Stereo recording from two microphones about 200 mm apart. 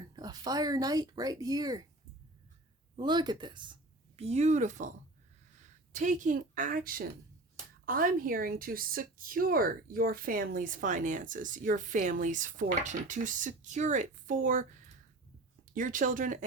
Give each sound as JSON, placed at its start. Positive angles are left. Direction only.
{"t": 0.0, "sound": "speech", "side_deg": -20}
{"t": 2.9, "sound": "speech", "side_deg": -20}
{"t": 4.2, "sound": "speech", "side_deg": -35}